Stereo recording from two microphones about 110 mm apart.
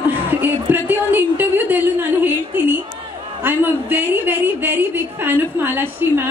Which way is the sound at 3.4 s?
20° right (ahead or behind).